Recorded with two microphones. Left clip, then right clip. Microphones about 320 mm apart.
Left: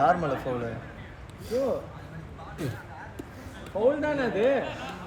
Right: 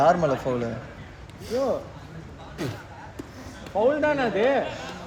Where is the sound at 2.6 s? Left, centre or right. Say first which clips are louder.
Right 3 dB; centre.